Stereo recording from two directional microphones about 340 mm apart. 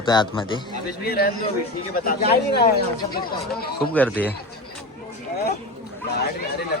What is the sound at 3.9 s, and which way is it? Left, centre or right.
Speech, centre.